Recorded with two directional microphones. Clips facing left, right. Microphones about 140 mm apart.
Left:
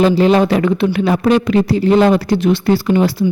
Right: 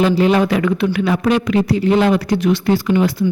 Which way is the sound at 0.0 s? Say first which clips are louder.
Left 3 dB; 30° left (ahead or behind).